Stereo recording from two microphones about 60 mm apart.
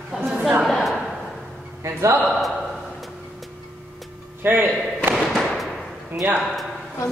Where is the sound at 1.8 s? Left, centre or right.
Right.